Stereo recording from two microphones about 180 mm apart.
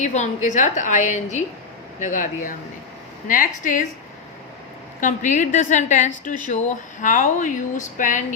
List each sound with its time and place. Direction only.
0.0 s a woman's voice: 40° left (ahead or behind)
4.9 s a woman's voice: 45° left (ahead or behind)